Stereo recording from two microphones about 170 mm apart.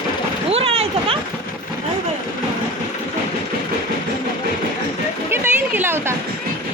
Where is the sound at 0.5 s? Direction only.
35° right (ahead or behind).